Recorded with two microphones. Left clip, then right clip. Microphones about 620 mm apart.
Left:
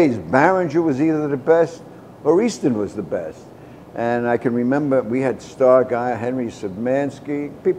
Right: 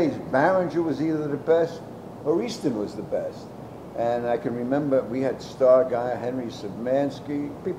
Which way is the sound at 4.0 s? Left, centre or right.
Left.